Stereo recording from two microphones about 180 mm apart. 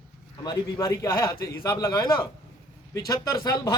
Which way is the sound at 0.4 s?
20° left (ahead or behind).